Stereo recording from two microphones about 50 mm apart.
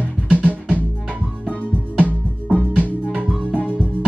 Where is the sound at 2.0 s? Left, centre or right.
Right.